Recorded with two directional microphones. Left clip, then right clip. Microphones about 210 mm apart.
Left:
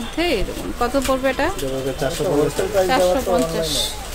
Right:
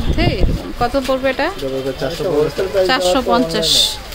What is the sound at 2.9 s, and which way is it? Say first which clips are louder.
Speech: right 2 dB; 30° right (ahead or behind).